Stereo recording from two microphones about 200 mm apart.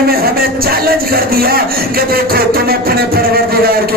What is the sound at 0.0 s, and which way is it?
Music, 50° right (ahead or behind).